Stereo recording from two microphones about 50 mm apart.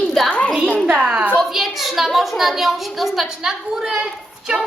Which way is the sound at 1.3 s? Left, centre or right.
Centre.